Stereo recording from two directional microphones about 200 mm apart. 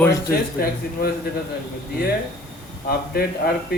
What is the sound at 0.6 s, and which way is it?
Speech, 50° left (ahead or behind).